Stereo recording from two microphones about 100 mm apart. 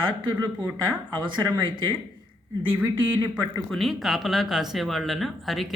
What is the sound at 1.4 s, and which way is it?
Speech, 25° right (ahead or behind).